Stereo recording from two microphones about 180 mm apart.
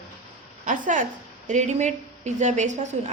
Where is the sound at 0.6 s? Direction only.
45° right (ahead or behind).